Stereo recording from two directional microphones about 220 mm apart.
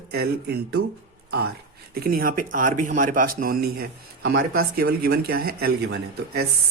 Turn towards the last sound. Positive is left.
turn(degrees=-45)  # may be behind; listen again after turning